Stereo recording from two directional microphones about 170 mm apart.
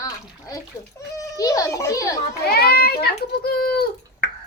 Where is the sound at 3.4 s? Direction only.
65° left (ahead or behind).